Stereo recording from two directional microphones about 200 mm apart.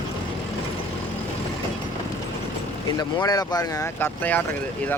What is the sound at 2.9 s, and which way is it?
Speech, 20° left (ahead or behind).